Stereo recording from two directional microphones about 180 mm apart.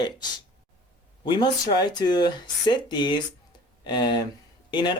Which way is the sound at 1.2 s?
25° left (ahead or behind).